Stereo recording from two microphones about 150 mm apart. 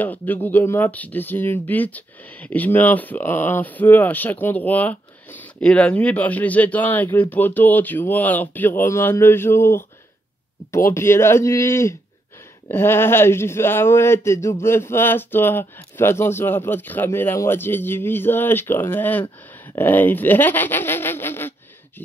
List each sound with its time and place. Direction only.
0.0 s speech: 10° left (ahead or behind)
10.9 s speech: 15° left (ahead or behind)